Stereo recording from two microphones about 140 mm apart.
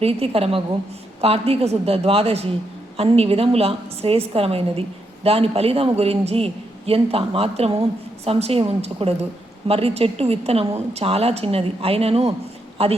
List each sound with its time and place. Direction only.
0.0 s a woman's voice: 45° right (ahead or behind)